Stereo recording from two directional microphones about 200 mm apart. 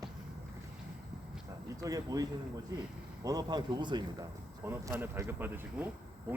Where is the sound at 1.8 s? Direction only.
15° right (ahead or behind).